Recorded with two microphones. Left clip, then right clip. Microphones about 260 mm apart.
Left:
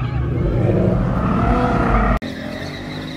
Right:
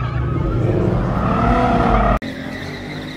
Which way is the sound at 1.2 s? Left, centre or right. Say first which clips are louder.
Right 3 dB; right.